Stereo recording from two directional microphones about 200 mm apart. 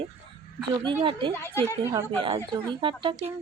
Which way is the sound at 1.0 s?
25° right (ahead or behind).